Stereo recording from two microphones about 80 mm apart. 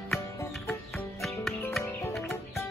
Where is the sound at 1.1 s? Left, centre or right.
Centre.